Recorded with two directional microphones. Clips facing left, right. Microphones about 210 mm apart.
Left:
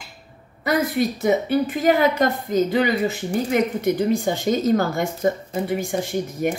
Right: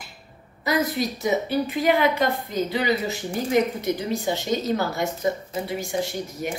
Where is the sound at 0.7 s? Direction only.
55° left (ahead or behind).